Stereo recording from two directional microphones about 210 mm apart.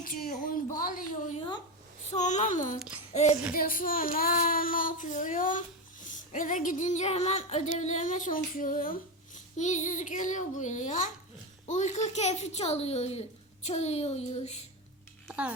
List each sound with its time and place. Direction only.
0.0 s a woman's voice: 45° left (ahead or behind)
0.8 s female singing: 40° left (ahead or behind)
3.1 s child singing: 35° left (ahead or behind)
3.5 s female singing: 45° left (ahead or behind)
15.3 s speech: 5° right (ahead or behind)